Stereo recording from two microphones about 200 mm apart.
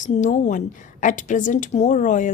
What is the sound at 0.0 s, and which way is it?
A woman's voice, 40° left (ahead or behind).